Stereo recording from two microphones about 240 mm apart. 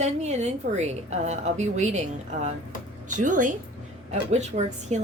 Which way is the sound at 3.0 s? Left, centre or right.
Right.